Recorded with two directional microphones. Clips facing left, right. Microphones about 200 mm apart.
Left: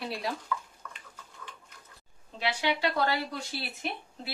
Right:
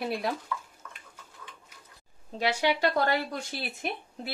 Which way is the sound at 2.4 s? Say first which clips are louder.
Right 3 dB; 45° right (ahead or behind).